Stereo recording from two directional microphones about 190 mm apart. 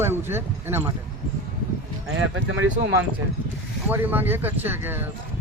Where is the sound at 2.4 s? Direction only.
80° right.